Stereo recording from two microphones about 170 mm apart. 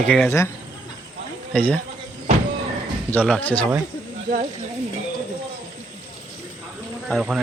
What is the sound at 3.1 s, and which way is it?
Speech, 10° left (ahead or behind).